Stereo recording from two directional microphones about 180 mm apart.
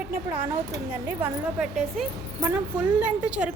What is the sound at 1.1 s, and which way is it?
Speech, 10° right (ahead or behind).